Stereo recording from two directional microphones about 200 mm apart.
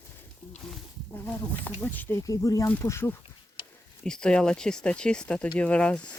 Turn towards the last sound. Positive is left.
turn(degrees=5)  # may be behind; listen again after turning